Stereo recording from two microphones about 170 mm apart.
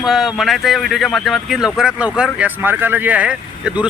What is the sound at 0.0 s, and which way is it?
Speech, centre (ahead or behind).